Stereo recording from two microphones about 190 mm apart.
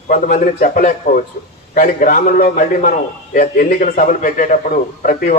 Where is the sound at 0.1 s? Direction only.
45° left (ahead or behind).